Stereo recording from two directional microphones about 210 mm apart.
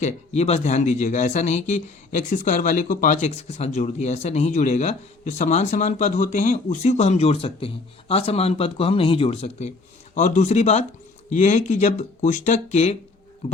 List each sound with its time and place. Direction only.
0.0 s speech: 30° left (ahead or behind)